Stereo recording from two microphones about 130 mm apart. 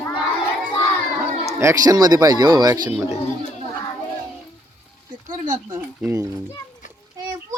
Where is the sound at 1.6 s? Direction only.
25° right (ahead or behind).